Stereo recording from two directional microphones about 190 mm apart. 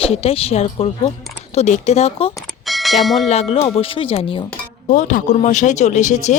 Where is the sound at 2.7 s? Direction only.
Centre (ahead or behind).